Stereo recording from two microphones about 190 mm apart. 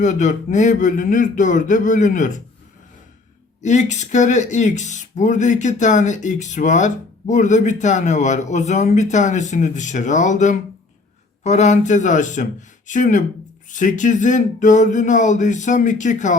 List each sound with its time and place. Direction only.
0.0 s speech: 40° left (ahead or behind)
3.6 s speech: 40° left (ahead or behind)